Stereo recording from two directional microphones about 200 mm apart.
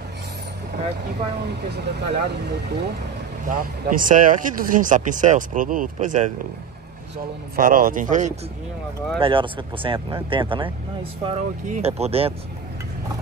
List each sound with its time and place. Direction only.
1.8 s speech: 55° right (ahead or behind)
3.4 s speech: 45° right (ahead or behind)
7.5 s speech: 45° right (ahead or behind)
9.2 s speech: 25° right (ahead or behind)